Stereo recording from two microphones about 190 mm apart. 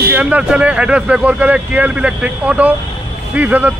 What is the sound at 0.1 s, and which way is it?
Speech, 5° right (ahead or behind).